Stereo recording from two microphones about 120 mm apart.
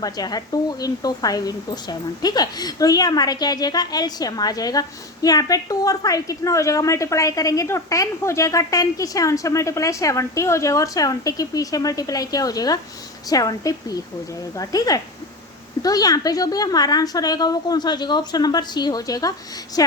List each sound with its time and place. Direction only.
0.0 s a woman's voice: 35° left (ahead or behind)